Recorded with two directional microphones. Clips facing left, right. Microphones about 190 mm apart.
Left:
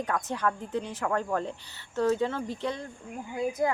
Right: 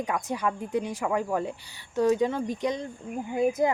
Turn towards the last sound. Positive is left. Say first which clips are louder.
# right 4 dB
turn(degrees=-20)  # may be behind; listen again after turning